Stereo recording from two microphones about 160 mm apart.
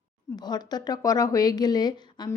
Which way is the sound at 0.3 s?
25° left (ahead or behind).